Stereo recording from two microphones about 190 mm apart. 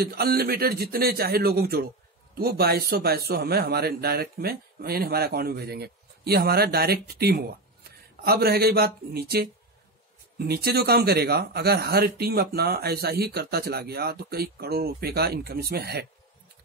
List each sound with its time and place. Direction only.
0.0 s a man's voice: 55° right (ahead or behind)